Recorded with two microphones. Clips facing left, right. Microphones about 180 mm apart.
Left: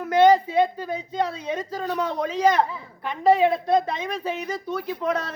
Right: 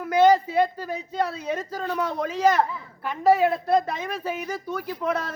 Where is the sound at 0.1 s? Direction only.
10° right (ahead or behind).